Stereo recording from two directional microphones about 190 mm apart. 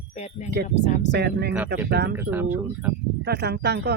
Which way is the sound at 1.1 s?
55° right (ahead or behind).